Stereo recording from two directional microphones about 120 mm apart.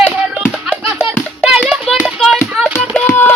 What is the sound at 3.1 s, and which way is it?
Music, 15° left (ahead or behind).